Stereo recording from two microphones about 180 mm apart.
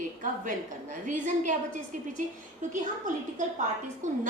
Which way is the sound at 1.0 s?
45° right (ahead or behind).